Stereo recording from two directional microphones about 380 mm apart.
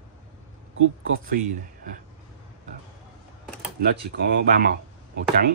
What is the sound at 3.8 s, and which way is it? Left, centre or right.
Speech, right.